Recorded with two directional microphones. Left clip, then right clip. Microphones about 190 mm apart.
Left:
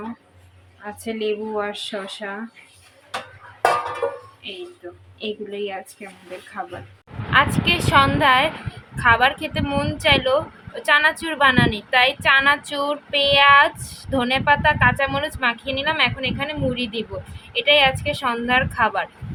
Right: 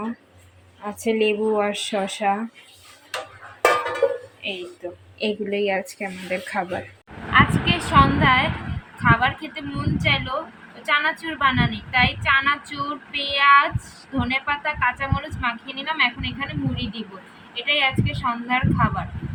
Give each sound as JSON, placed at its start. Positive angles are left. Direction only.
{"t": 0.9, "sound": "a woman's voice", "side_deg": -15}
{"t": 4.4, "sound": "a woman's voice", "side_deg": -15}
{"t": 7.3, "sound": "a woman's voice", "side_deg": 60}